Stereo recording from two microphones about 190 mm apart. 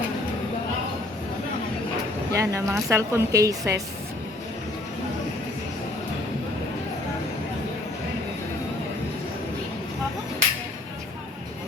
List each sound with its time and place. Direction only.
2.3 s speech: 15° right (ahead or behind)